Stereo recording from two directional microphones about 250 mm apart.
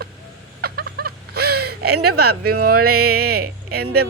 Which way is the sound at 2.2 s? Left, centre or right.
Right.